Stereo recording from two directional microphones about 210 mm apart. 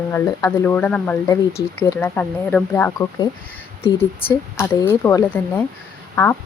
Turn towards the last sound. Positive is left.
turn(degrees=10)  # may be behind; listen again after turning